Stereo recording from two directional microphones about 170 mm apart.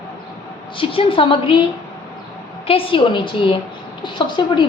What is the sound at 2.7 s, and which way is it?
A woman's voice, 30° left (ahead or behind).